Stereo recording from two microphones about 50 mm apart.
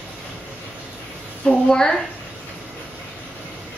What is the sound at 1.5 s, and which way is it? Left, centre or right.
Speech, centre.